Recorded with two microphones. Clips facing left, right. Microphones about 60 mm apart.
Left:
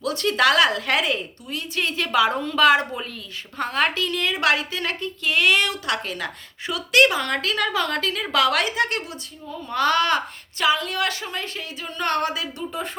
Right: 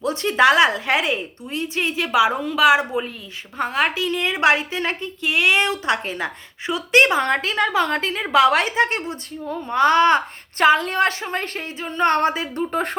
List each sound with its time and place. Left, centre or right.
0.0 s a woman's voice: right
10.6 s a woman's voice: right
12.7 s speech: right